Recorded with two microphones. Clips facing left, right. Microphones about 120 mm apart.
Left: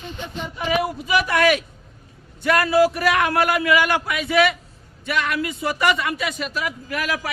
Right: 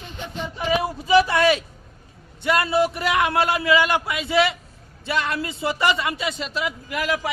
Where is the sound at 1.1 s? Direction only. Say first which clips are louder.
Right 3 dB; 30° right (ahead or behind).